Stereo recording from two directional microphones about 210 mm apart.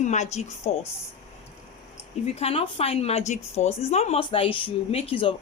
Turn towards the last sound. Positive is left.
turn(degrees=25)  # may be behind; listen again after turning